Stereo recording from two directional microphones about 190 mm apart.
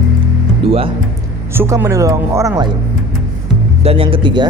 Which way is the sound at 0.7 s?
30° right (ahead or behind).